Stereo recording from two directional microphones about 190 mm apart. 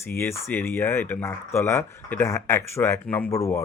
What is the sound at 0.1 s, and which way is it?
Speech, 10° left (ahead or behind).